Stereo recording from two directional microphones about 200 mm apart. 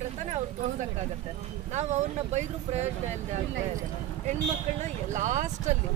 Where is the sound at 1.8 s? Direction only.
35° right (ahead or behind).